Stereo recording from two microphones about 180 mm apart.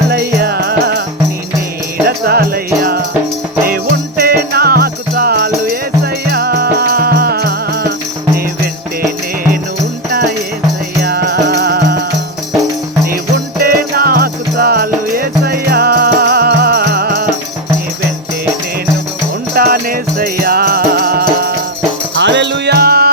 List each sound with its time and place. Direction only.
0.1 s music: 60° right (ahead or behind)
2.0 s music: 60° right (ahead or behind)
4.2 s music: 55° right (ahead or behind)
9.0 s music: 50° right (ahead or behind)
11.0 s music: 60° right (ahead or behind)
13.6 s music: 55° right (ahead or behind)
19.5 s music: 60° right (ahead or behind)
22.2 s music: 75° right (ahead or behind); by 23.1 s 60° right (ahead or behind)